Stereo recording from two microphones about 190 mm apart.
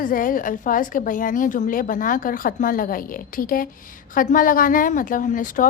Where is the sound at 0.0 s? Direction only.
45° left (ahead or behind).